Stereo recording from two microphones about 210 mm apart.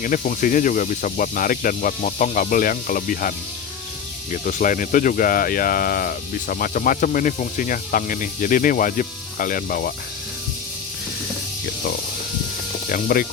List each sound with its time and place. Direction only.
0.0 s speech: 40° left (ahead or behind)
12.9 s speech: 40° left (ahead or behind)